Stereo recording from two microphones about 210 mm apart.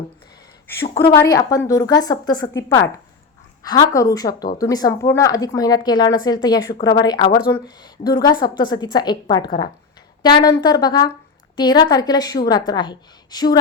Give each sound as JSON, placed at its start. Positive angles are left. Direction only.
{"t": 1.3, "sound": "a woman's voice", "side_deg": 15}